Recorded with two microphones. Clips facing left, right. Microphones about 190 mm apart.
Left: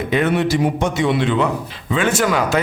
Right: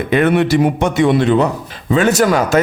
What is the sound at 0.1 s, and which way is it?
A man's voice, 60° right (ahead or behind).